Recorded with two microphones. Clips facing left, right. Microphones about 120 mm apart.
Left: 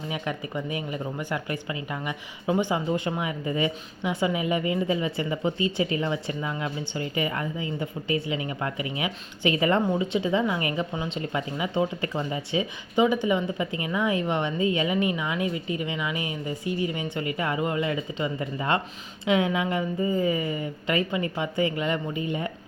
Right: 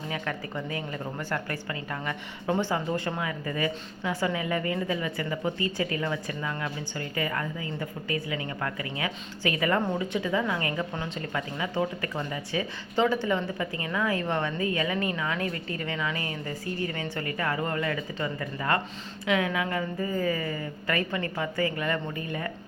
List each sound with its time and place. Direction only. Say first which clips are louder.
0.1 s speech: left 2 dB; 15° left (ahead or behind)